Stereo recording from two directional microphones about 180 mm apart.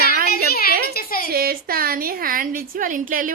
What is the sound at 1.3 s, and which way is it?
A woman's voice, 55° right (ahead or behind).